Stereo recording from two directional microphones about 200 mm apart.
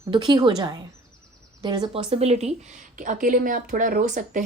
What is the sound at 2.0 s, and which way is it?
Speech, 30° right (ahead or behind).